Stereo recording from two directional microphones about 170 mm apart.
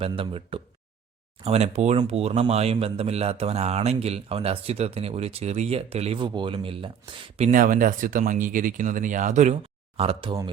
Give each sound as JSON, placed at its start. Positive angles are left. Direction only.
{"t": 0.2, "sound": "a man's voice", "side_deg": -35}
{"t": 7.5, "sound": "speech", "side_deg": -55}
{"t": 10.0, "sound": "a man's voice", "side_deg": -35}